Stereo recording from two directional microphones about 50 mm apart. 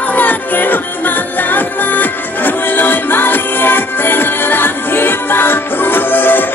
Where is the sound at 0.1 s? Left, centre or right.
Left.